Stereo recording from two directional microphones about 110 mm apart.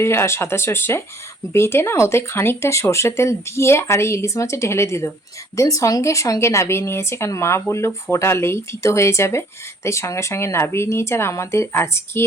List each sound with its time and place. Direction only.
0.0 s speech: 25° left (ahead or behind)